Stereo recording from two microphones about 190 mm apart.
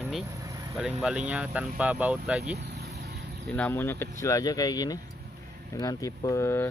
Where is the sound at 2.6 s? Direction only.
60° right (ahead or behind).